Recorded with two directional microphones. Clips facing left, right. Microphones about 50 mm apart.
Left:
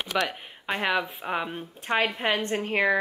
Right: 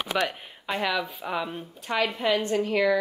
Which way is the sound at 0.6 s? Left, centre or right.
Left.